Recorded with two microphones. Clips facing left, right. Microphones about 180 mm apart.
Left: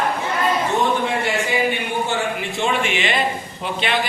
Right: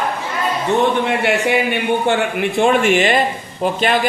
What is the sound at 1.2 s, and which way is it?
A man's voice, 65° right (ahead or behind).